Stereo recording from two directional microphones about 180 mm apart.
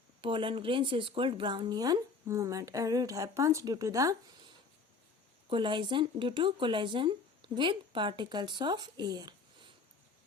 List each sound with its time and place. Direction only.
0.2 s a woman's voice: 30° right (ahead or behind)
5.5 s a woman's voice: 25° right (ahead or behind)